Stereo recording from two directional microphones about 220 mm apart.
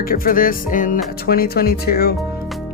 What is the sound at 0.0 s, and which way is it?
Speech, 40° left (ahead or behind).